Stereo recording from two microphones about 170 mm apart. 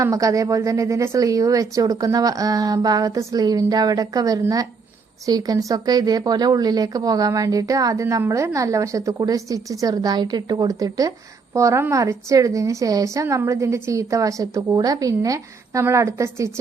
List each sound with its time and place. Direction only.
0.0 s a woman's voice: 20° right (ahead or behind)